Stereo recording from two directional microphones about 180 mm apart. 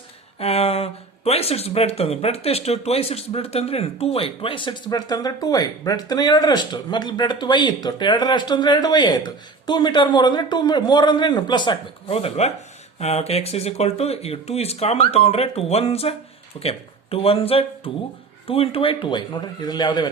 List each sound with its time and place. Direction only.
0.3 s speech: 35° left (ahead or behind)